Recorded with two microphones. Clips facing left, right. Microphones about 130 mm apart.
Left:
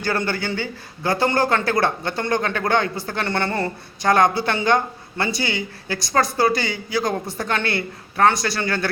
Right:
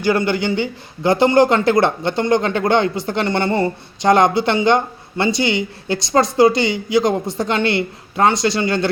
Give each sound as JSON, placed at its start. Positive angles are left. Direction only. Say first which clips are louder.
{"t": 0.0, "sound": "a man's voice", "louder": "right 6 dB", "side_deg": -15}